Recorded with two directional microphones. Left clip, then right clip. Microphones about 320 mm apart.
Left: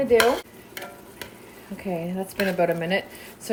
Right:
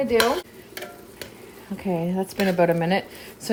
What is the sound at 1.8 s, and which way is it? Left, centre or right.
Speech, right.